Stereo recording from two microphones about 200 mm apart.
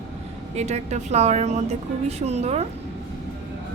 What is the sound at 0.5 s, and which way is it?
A woman's voice, 35° right (ahead or behind).